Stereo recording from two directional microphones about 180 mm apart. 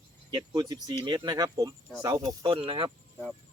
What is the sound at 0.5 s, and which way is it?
Speech, 20° right (ahead or behind).